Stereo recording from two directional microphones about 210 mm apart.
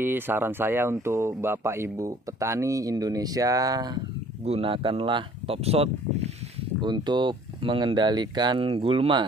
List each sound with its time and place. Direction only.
0.0 s speech: 10° right (ahead or behind); by 9.2 s 25° right (ahead or behind)